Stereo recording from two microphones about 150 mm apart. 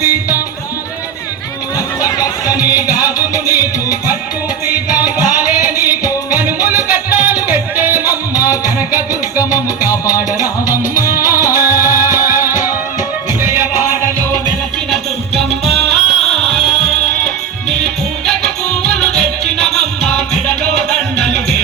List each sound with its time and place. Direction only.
0.0 s music: 15° right (ahead or behind)
2.0 s music: 20° left (ahead or behind)
2.5 s music: 10° right (ahead or behind)
5.6 s music: 15° right (ahead or behind)
11.3 s music: 15° right (ahead or behind)
15.4 s music: centre (ahead or behind)
18.3 s music: 5° left (ahead or behind)